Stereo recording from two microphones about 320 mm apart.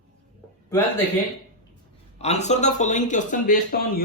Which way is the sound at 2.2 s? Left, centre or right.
Left.